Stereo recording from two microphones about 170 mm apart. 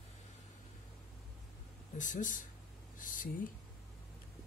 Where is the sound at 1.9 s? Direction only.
50° left (ahead or behind).